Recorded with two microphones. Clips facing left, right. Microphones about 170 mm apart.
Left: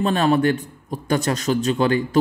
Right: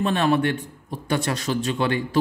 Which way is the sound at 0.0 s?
40° left (ahead or behind).